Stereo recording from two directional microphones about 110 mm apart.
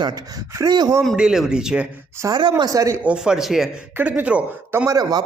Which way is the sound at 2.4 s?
45° right (ahead or behind).